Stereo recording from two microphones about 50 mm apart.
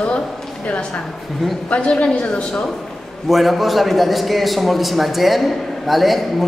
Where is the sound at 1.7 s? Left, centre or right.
Left.